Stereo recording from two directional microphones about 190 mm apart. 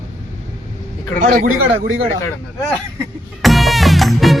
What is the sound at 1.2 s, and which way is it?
Speech, 45° right (ahead or behind).